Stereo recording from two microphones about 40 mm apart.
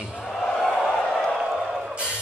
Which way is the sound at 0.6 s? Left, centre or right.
Centre.